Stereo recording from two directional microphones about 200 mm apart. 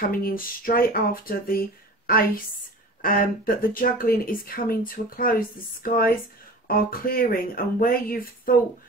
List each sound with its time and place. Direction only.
0.1 s speech: 45° left (ahead or behind)